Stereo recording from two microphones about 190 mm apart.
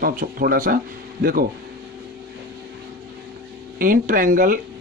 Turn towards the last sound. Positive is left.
turn(degrees=-45)  # may be behind; listen again after turning